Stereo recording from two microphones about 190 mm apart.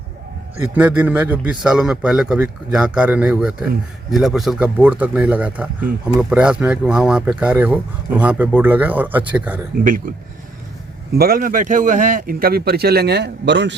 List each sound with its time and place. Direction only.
0.7 s speech: 10° right (ahead or behind)
11.2 s speech: 50° right (ahead or behind); by 13.7 s 65° right (ahead or behind)